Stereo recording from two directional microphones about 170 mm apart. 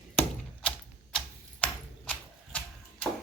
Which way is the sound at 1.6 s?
10° left (ahead or behind).